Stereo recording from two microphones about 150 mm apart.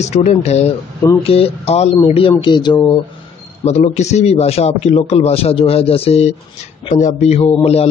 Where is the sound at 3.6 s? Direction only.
50° left (ahead or behind).